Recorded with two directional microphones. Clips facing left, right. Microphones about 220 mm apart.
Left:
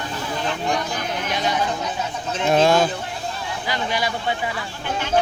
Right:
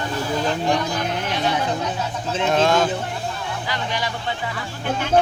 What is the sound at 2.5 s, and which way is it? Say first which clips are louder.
A man's voice: left 2 dB; 10° left (ahead or behind).